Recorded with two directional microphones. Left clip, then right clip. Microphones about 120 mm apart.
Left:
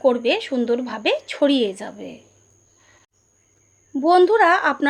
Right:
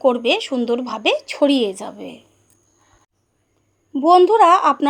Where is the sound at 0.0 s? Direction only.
35° right (ahead or behind).